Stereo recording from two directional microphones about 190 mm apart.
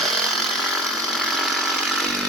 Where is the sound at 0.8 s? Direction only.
Centre (ahead or behind).